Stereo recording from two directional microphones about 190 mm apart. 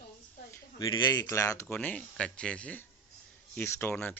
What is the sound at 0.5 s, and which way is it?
Speech, 20° left (ahead or behind).